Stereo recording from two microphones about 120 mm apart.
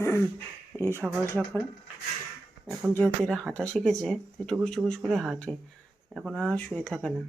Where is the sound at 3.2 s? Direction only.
5° left (ahead or behind).